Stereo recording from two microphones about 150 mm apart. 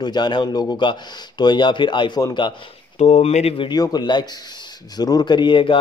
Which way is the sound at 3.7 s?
25° left (ahead or behind).